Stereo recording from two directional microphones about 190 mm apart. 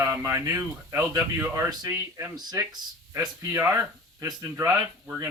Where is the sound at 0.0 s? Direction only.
15° right (ahead or behind).